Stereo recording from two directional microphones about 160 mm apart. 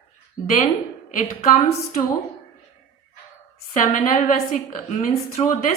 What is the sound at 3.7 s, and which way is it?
A woman's voice, 55° left (ahead or behind).